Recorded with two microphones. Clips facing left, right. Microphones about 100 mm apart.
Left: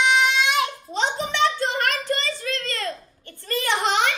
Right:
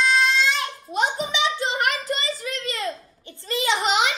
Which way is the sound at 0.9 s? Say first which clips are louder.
Even; 10° right (ahead or behind).